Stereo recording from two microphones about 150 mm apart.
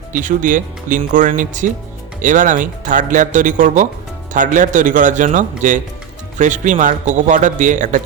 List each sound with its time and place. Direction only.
0.1 s speech: 60° right (ahead or behind)